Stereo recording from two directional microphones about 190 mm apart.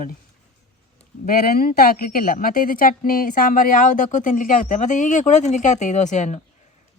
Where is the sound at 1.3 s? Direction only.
50° left (ahead or behind).